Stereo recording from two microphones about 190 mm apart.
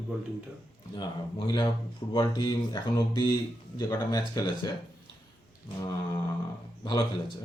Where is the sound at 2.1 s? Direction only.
20° left (ahead or behind).